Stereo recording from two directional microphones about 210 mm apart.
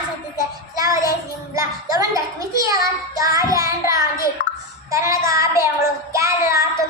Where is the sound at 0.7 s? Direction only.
15° right (ahead or behind).